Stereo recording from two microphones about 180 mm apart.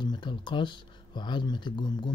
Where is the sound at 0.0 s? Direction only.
25° left (ahead or behind).